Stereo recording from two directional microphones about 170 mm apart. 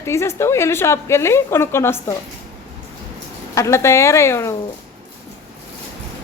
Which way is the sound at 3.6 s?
15° left (ahead or behind).